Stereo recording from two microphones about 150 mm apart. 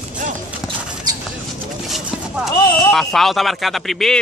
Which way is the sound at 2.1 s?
5° right (ahead or behind).